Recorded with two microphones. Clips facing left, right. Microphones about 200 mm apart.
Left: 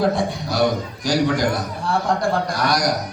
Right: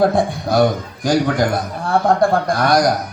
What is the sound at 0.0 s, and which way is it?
A man's voice, 55° right (ahead or behind).